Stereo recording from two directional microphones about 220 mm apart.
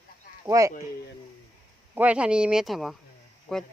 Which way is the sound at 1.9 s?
5° right (ahead or behind).